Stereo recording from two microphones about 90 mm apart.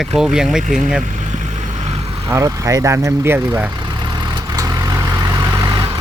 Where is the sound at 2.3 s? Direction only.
35° right (ahead or behind).